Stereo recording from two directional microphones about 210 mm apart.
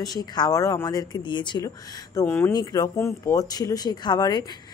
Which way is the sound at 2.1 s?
10° left (ahead or behind).